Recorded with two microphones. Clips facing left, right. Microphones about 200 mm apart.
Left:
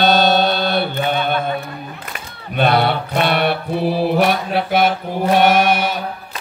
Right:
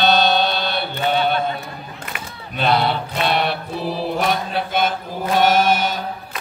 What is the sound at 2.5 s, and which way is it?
Mantra, 55° left (ahead or behind).